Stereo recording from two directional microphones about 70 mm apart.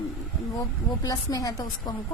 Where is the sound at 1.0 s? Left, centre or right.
Left.